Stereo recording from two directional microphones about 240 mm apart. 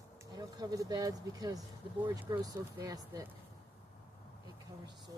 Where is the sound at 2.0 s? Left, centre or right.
Centre.